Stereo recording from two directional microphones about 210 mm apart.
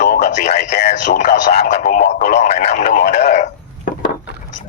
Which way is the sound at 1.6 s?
35° left (ahead or behind).